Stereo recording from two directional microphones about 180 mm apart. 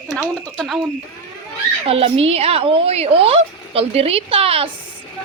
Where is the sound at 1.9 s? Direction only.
30° right (ahead or behind).